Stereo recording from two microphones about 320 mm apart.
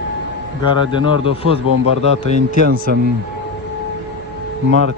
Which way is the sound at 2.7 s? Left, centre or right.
Right.